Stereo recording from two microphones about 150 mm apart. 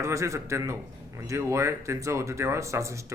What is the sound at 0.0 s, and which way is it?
A man's voice, 20° right (ahead or behind).